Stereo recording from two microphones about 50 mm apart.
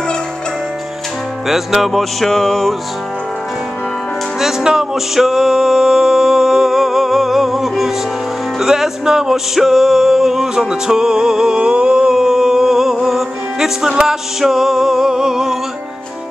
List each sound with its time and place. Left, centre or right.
1.5 s music: centre
4.4 s music: centre